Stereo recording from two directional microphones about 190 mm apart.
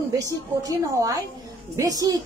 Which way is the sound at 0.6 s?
20° right (ahead or behind).